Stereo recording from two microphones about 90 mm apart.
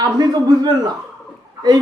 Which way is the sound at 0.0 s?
50° right (ahead or behind).